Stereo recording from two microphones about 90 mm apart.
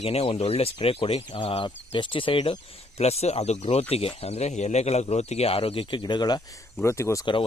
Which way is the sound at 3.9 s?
90° left.